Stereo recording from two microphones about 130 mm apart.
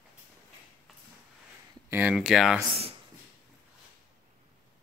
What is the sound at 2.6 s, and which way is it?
Speech, 50° right (ahead or behind).